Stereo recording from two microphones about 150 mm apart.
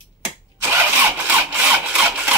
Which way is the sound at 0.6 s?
15° right (ahead or behind).